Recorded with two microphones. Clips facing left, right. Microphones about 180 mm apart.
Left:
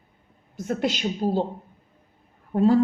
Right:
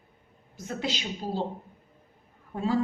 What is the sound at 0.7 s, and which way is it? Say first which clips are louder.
Speech: left 7 dB; 50° left (ahead or behind).